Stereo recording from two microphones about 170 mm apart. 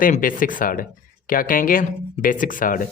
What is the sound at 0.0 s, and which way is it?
A man's voice, 55° left (ahead or behind).